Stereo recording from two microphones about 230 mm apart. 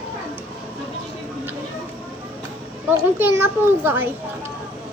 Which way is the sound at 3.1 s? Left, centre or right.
Centre.